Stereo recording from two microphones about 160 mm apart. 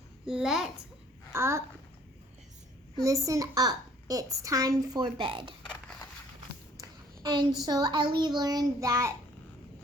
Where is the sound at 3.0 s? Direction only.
20° right (ahead or behind).